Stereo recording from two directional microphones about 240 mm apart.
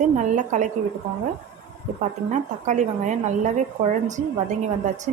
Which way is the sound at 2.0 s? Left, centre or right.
Right.